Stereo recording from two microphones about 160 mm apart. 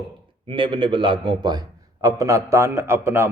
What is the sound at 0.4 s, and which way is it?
A man's voice, 30° right (ahead or behind).